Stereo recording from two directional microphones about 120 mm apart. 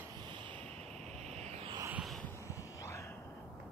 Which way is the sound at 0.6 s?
60° right (ahead or behind).